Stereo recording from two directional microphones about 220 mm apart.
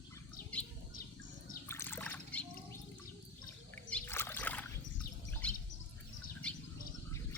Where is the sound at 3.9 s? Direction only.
10° left (ahead or behind).